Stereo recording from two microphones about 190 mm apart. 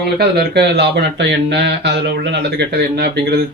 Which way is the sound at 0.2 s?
60° right (ahead or behind).